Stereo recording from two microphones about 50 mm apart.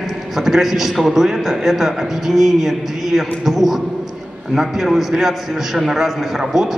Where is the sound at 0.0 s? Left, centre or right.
Centre.